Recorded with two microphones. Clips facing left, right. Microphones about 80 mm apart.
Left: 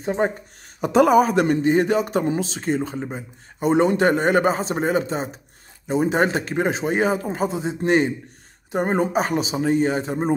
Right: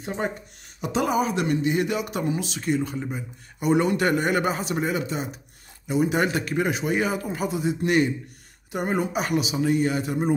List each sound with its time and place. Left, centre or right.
0.0 s speech: left
0.7 s a man's voice: left